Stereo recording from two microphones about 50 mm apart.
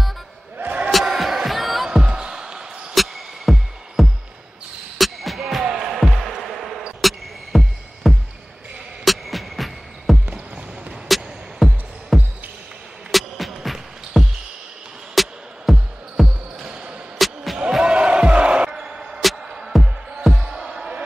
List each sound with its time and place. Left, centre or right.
0.9 s music: centre
1.9 s music: centre
2.9 s music: centre
4.9 s basketball bounce: centre
5.7 s music: centre
5.9 s basketball bounce: centre
7.0 s music: centre
17.6 s a sound: centre
18.7 s basketball bounce: centre
19.7 s music: centre
20.3 s music: centre